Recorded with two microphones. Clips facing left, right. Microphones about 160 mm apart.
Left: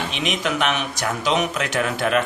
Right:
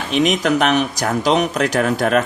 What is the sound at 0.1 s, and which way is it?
Speech, 40° right (ahead or behind).